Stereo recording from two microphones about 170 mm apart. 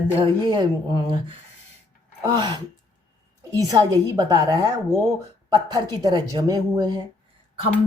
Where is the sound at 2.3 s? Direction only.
25° right (ahead or behind).